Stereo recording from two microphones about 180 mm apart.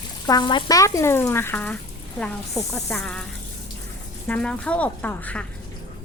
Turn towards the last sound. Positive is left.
turn(degrees=10)  # may be behind; listen again after turning